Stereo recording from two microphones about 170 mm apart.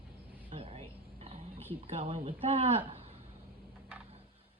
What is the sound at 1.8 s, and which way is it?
Speech, 35° right (ahead or behind).